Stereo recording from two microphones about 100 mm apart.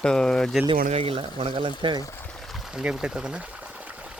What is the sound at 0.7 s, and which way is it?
Speech, 70° right (ahead or behind).